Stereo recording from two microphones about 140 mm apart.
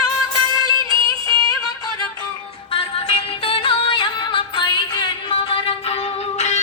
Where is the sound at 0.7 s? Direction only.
25° left (ahead or behind).